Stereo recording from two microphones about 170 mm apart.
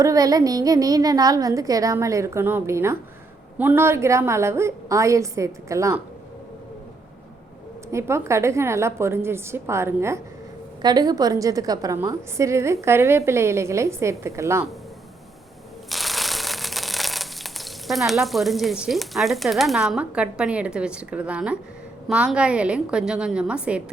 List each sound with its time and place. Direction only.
0.0 s a woman's voice: 20° right (ahead or behind)
7.9 s a woman's voice: 15° right (ahead or behind)
15.9 s a sound: centre (ahead or behind)
22.0 s a woman's voice: 5° right (ahead or behind)